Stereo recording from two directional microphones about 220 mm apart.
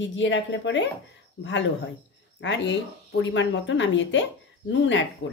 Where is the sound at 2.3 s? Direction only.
55° left (ahead or behind).